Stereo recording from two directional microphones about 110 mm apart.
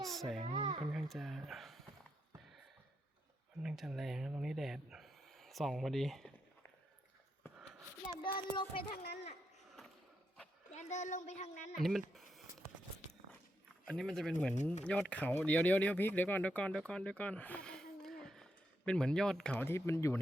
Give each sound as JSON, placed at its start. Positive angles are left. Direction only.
{"t": 0.0, "sound": "a sound", "side_deg": 0}
{"t": 0.4, "sound": "speech", "side_deg": -50}
{"t": 0.9, "sound": "speech", "side_deg": 0}
{"t": 3.6, "sound": "speech", "side_deg": -5}
{"t": 8.2, "sound": "child singing", "side_deg": 50}
{"t": 10.7, "sound": "a woman's voice", "side_deg": 90}
{"t": 11.8, "sound": "speech", "side_deg": 0}
{"t": 13.8, "sound": "speech", "side_deg": 10}
{"t": 19.6, "sound": "speech", "side_deg": 25}